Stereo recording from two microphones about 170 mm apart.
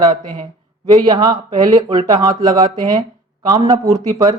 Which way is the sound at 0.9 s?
20° right (ahead or behind).